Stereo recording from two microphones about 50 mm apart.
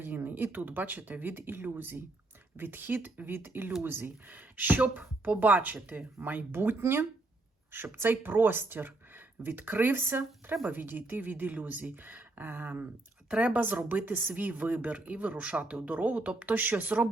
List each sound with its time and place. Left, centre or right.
0.0 s speech: right
13.3 s speech: right